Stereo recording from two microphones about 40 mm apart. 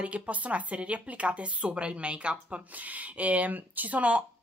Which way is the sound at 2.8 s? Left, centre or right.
Right.